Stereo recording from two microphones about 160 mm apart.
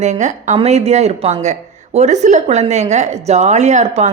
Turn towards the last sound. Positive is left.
turn(degrees=-45)  # may be behind; listen again after turning